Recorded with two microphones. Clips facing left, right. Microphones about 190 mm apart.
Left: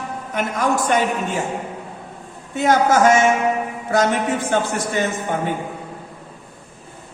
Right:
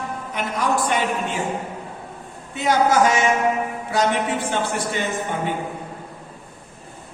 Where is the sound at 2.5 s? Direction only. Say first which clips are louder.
Left 2 dB; 50° left (ahead or behind).